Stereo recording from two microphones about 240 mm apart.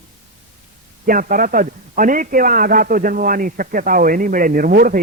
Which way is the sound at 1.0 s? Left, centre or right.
Right.